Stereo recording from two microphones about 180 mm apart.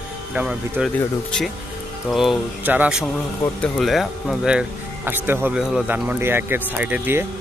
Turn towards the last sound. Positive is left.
turn(degrees=-10)  # may be behind; listen again after turning